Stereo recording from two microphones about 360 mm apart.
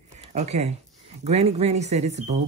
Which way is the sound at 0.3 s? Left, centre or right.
Centre.